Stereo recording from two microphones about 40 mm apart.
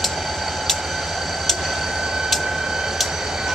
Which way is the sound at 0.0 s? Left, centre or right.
Centre.